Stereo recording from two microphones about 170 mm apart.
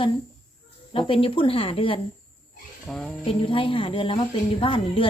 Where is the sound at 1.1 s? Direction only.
30° left (ahead or behind).